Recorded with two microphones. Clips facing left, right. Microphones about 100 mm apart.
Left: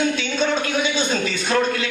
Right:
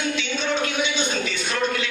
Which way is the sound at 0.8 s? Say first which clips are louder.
Left 3 dB; 40° left (ahead or behind).